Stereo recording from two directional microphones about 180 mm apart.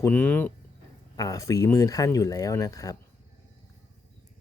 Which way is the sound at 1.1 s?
20° left (ahead or behind).